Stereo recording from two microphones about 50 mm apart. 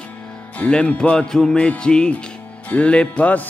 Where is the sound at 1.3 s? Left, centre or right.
Centre.